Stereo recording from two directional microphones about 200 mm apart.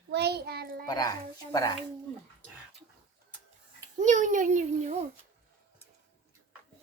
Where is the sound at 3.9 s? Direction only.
40° right (ahead or behind).